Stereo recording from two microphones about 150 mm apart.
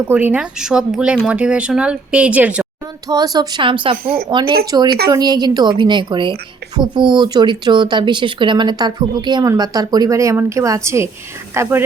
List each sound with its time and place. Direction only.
0.1 s speech: 10° right (ahead or behind)
3.1 s speech: 25° right (ahead or behind)
4.0 s a woman's voice: 75° right (ahead or behind)
4.3 s a woman's voice: 30° right (ahead or behind)